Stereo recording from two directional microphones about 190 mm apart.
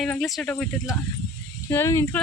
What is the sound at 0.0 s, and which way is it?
Speech, centre (ahead or behind).